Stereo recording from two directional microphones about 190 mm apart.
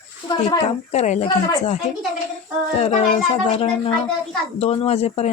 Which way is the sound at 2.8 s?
35° left (ahead or behind).